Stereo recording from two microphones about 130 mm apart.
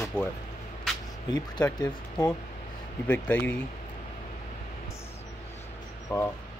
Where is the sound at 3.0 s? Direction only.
15° left (ahead or behind).